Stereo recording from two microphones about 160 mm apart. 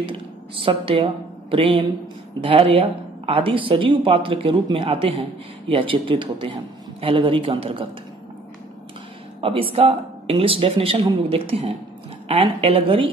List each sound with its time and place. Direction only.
0.6 s a woman's voice: 35° right (ahead or behind)
9.4 s a woman's voice: 35° right (ahead or behind)